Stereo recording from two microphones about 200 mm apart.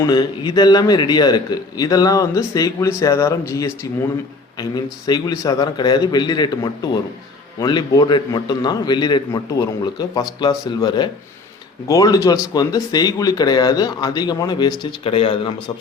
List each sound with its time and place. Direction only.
0.0 s a man's voice: 20° left (ahead or behind)